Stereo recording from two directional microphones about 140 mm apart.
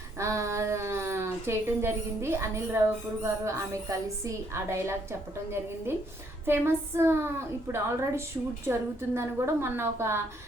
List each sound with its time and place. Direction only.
0.2 s speech: 20° right (ahead or behind)
6.4 s a woman's voice: 15° right (ahead or behind)